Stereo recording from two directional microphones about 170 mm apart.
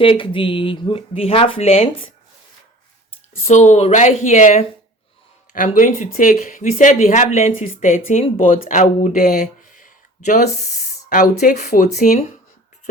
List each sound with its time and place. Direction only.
0.0 s speech: 30° left (ahead or behind)
3.4 s speech: 40° left (ahead or behind)